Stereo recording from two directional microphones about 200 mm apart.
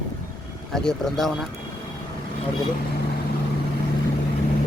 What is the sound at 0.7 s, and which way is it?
Speech, centre (ahead or behind).